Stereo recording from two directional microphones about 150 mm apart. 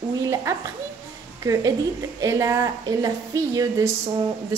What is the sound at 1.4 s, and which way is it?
Speech, 20° right (ahead or behind).